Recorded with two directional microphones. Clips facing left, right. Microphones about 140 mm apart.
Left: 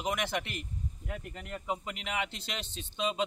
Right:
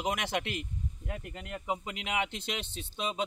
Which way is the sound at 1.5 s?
10° right (ahead or behind).